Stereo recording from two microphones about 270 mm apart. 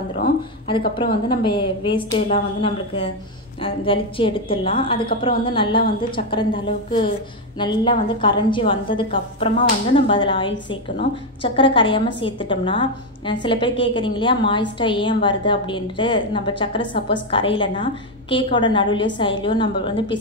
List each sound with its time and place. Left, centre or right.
1.3 s a woman's voice: centre